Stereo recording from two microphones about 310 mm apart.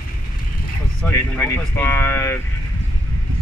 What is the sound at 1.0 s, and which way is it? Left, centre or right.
Speech, centre.